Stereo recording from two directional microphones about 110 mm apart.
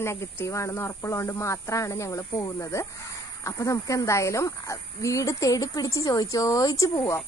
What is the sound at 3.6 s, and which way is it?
A woman's voice, 30° left (ahead or behind).